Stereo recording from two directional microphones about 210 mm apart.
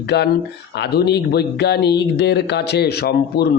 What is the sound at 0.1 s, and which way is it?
A man's voice, 50° left (ahead or behind).